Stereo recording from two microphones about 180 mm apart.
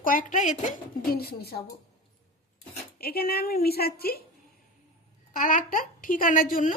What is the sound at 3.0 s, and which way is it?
A woman's voice, 55° left (ahead or behind).